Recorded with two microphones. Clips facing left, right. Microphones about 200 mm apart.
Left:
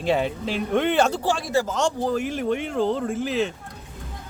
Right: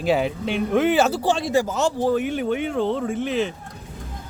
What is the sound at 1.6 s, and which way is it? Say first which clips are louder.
Speech: right 2 dB; 10° right (ahead or behind).